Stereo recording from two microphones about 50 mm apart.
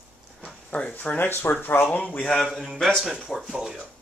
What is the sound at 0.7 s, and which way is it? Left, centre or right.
Speech, left.